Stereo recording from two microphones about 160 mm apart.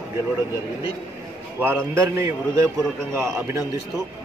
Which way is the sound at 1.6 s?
15° right (ahead or behind).